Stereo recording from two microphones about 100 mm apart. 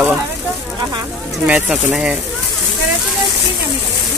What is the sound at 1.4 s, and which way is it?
Speech, 10° right (ahead or behind).